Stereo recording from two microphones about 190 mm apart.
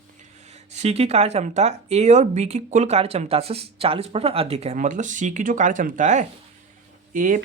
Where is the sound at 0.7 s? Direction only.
35° right (ahead or behind).